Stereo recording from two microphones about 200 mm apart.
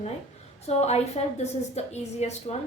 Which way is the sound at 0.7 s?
30° left (ahead or behind).